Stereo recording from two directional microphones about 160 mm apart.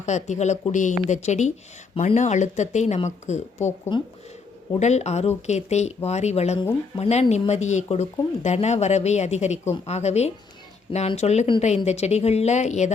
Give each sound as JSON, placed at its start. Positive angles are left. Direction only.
{"t": 0.0, "sound": "speech", "side_deg": 45}
{"t": 4.8, "sound": "speech", "side_deg": 45}